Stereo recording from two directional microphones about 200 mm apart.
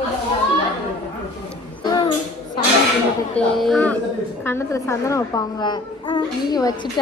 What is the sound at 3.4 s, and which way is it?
A woman's voice, centre (ahead or behind).